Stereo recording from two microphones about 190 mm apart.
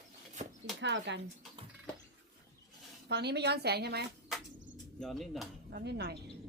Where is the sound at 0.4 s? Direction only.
40° right (ahead or behind).